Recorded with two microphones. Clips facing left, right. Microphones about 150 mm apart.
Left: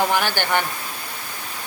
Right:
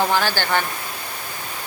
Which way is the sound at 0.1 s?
15° left (ahead or behind).